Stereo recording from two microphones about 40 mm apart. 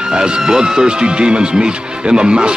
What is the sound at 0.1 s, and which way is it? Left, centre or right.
Speech, centre.